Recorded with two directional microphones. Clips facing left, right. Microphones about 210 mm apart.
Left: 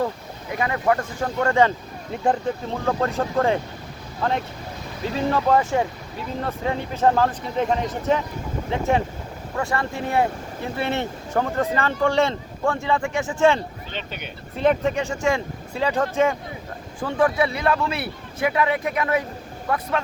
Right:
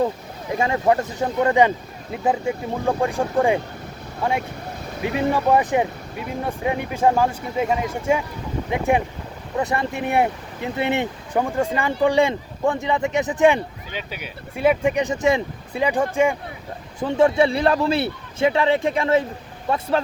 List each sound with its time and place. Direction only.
0.5 s speech: 25° right (ahead or behind)